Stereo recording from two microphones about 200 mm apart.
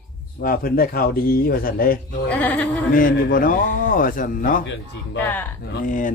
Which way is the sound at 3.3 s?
45° left (ahead or behind).